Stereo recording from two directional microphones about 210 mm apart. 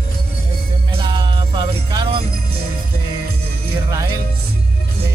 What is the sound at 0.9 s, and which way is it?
Music, 25° right (ahead or behind).